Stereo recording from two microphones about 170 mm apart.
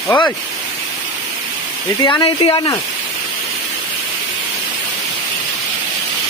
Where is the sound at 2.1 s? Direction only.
30° left (ahead or behind).